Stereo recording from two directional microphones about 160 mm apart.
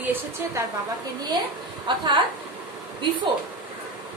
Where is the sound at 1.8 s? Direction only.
30° right (ahead or behind).